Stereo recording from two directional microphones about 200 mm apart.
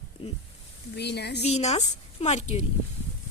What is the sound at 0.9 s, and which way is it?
Speech, 55° left (ahead or behind).